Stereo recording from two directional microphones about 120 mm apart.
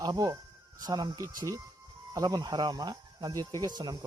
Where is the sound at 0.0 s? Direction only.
30° right (ahead or behind).